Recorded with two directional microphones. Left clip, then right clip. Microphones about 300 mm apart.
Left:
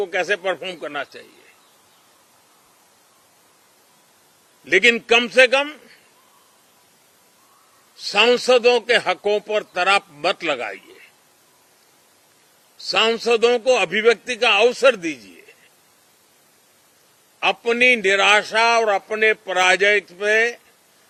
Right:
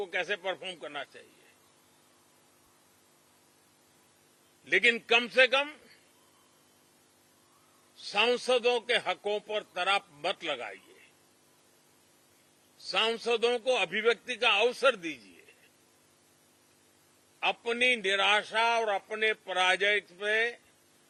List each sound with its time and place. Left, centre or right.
0.0 s a man's voice: centre
4.6 s a man's voice: centre
8.0 s a man's voice: centre
12.9 s a man's voice: centre
17.4 s a man's voice: centre